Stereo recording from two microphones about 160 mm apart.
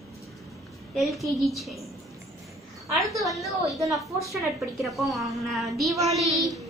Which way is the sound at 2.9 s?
Centre (ahead or behind).